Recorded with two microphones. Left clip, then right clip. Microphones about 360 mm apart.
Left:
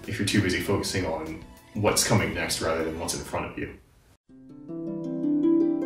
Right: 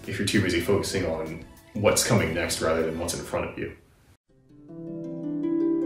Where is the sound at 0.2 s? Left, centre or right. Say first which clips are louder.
Right 1 dB; centre.